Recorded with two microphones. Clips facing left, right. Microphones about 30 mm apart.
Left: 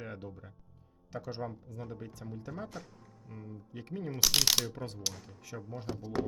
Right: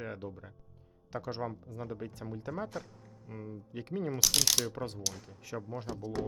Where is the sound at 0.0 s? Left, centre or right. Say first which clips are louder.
Right 3 dB; centre.